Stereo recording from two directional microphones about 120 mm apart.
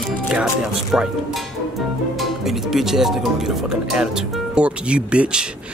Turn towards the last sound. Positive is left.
turn(degrees=-10)  # may be behind; listen again after turning